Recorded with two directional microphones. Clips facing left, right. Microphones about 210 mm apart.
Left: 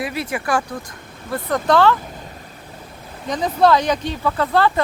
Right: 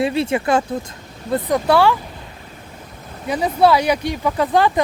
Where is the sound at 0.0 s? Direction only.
25° right (ahead or behind).